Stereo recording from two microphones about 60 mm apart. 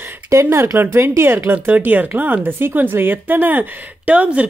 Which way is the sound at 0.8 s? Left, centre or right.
Right.